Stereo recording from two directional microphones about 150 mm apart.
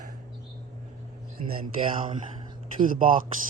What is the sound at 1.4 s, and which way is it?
Speech, 45° right (ahead or behind).